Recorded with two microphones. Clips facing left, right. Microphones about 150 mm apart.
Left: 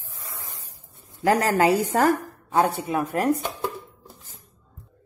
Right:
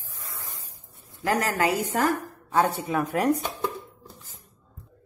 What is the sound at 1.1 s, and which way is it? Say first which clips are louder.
A woman's voice: left 5 dB; 30° left (ahead or behind).